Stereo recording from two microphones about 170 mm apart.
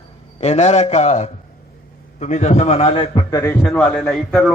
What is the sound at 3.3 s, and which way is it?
A man's voice, 15° left (ahead or behind).